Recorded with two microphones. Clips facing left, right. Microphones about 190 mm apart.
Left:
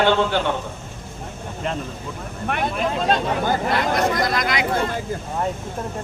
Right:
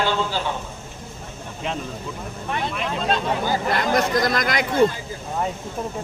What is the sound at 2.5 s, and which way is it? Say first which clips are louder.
Speech: left 3 dB; 60° left (ahead or behind).